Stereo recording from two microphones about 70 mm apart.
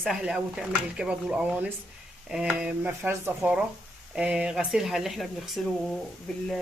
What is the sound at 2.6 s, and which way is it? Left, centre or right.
Speech, centre.